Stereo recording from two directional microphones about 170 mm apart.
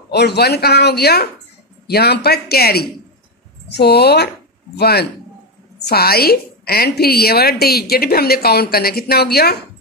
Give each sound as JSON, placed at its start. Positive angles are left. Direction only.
{"t": 0.1, "sound": "a woman's voice", "side_deg": 80}